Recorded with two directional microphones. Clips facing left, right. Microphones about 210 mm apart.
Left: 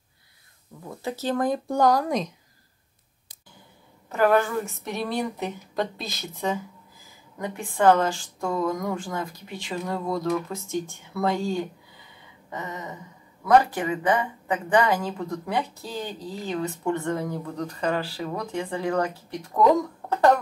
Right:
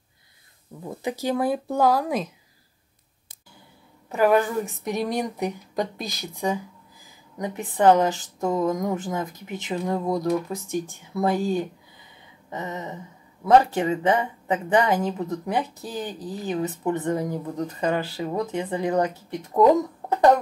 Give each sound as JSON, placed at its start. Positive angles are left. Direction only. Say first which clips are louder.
{"t": 0.8, "sound": "a woman's voice", "louder": "right 2 dB", "side_deg": -15}
{"t": 4.1, "sound": "a woman's voice", "louder": "right 1 dB", "side_deg": -15}
{"t": 20.1, "sound": "a sound", "louder": "right 2 dB", "side_deg": -20}